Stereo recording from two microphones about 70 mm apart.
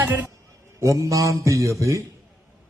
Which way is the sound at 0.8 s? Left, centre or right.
Right.